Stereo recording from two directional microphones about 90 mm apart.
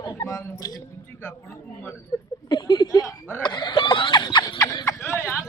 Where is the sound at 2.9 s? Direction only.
40° left (ahead or behind).